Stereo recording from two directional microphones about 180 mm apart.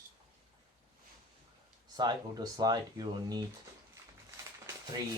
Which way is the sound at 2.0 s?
20° right (ahead or behind).